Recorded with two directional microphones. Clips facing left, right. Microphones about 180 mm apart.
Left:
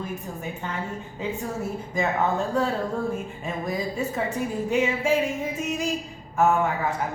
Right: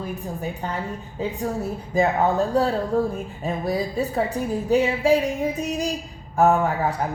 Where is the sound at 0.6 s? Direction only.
35° right (ahead or behind).